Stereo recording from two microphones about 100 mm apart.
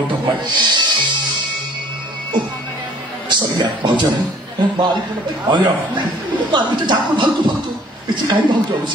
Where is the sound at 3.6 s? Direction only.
50° right (ahead or behind).